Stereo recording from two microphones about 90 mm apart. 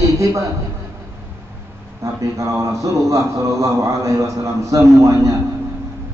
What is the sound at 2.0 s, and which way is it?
A man's voice, 35° right (ahead or behind).